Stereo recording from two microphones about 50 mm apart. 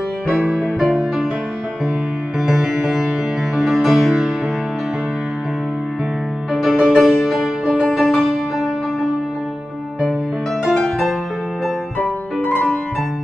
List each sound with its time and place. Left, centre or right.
2.4 s music: centre
3.5 s music: centre
6.5 s music: centre